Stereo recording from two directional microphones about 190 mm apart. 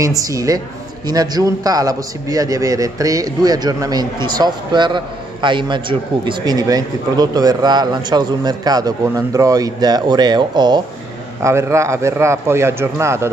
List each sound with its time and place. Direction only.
0.0 s a man's voice: 15° right (ahead or behind)